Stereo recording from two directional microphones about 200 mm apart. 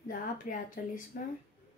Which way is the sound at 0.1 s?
40° left (ahead or behind).